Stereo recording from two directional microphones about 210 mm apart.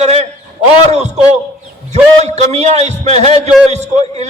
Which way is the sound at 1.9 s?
30° right (ahead or behind).